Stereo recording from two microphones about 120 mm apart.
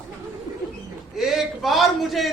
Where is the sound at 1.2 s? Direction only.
Centre (ahead or behind).